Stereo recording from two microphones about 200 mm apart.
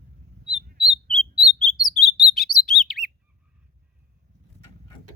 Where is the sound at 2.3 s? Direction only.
Centre (ahead or behind).